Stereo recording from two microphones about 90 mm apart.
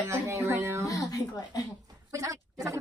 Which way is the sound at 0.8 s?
40° left (ahead or behind).